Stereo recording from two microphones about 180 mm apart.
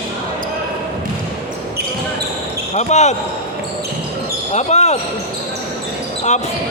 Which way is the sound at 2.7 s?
40° left (ahead or behind).